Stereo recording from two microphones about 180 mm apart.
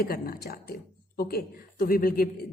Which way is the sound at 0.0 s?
55° left (ahead or behind).